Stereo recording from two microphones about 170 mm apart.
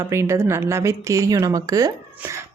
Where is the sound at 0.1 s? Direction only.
15° right (ahead or behind).